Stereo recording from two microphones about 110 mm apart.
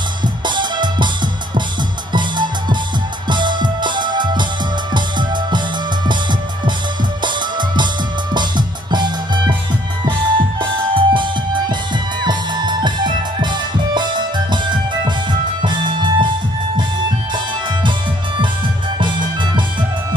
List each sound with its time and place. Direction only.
0.5 s music: 45° right (ahead or behind)
7.2 s music: 45° right (ahead or behind)
18.9 s music: 45° right (ahead or behind)